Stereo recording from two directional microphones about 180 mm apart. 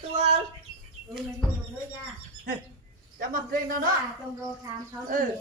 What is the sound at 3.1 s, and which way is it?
Speech, 50° right (ahead or behind).